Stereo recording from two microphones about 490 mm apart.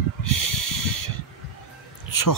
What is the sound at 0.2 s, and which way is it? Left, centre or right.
Snort, left.